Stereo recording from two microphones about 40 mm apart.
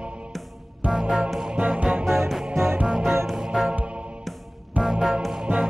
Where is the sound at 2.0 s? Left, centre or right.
Centre.